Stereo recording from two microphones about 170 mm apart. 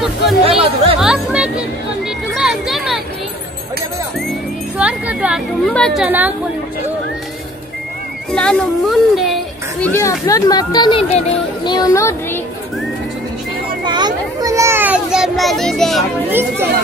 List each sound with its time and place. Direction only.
0.5 s speech: 35° right (ahead or behind)
0.9 s music: 5° right (ahead or behind)
2.3 s a sound: centre (ahead or behind)
4.7 s a sound: 5° right (ahead or behind)
5.7 s speech: 5° left (ahead or behind)
6.0 s speech: 10° right (ahead or behind)
8.3 s speech: 5° left (ahead or behind)
9.8 s speech: 15° left (ahead or behind); by 11.2 s 35° left (ahead or behind)
11.6 s speech: 25° left (ahead or behind)
13.8 s children playing: 25° right (ahead or behind); by 16.0 s centre (ahead or behind)
16.3 s speech: 10° right (ahead or behind)